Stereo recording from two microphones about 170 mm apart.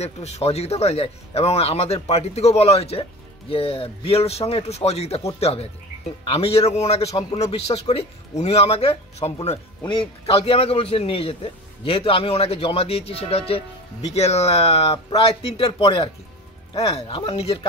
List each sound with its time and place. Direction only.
0.0 s speech: 40° left (ahead or behind)